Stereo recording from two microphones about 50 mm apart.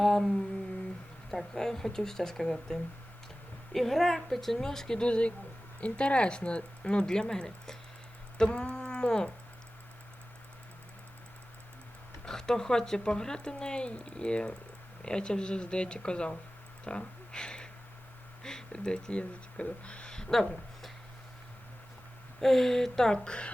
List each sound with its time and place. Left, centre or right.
0.0 s humming: centre
1.3 s speech: centre
12.2 s speech: centre
16.8 s a sound: centre
18.4 s speech: centre
22.4 s speech: centre